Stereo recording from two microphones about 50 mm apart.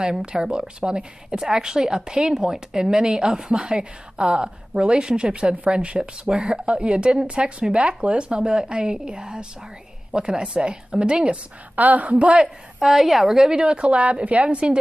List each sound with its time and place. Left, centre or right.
0.0 s speech: centre
11.7 s a woman's voice: right
12.8 s a woman's voice: centre; by 14.8 s right